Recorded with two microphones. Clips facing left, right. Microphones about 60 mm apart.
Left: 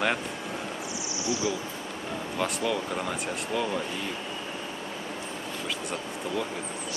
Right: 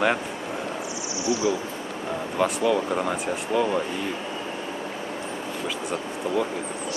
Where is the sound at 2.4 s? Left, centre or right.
Centre.